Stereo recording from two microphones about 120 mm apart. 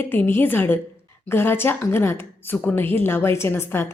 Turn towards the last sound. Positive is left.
turn(degrees=20)  # may be behind; listen again after turning